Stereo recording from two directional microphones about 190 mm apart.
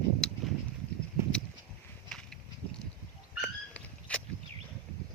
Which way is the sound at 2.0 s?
5° left (ahead or behind).